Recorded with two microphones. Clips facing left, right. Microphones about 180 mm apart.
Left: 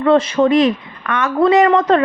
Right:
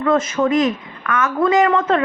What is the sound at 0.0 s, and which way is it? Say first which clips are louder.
Speech: left 4 dB; 35° left (ahead or behind).